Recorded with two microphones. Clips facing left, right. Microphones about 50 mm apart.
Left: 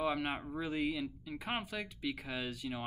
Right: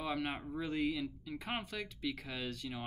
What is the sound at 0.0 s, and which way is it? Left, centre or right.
Speech, centre.